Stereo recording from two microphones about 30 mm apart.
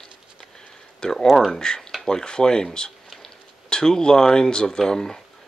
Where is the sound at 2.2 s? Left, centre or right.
Left.